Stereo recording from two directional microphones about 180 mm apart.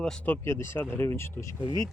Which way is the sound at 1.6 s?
25° right (ahead or behind).